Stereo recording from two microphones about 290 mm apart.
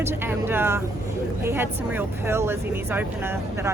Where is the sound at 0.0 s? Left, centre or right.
Centre.